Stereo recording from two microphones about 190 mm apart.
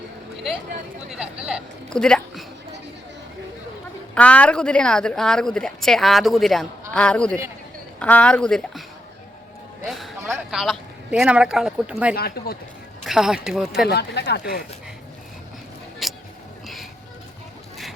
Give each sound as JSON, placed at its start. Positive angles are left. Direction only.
{"t": 1.1, "sound": "a woman's voice", "side_deg": -5}
{"t": 4.1, "sound": "a woman's voice", "side_deg": 5}
{"t": 9.8, "sound": "a man's voice", "side_deg": 0}
{"t": 12.1, "sound": "speech", "side_deg": 55}
{"t": 13.1, "sound": "a woman's voice", "side_deg": -5}
{"t": 13.8, "sound": "speech", "side_deg": 60}
{"t": 16.0, "sound": "vehicle", "side_deg": 0}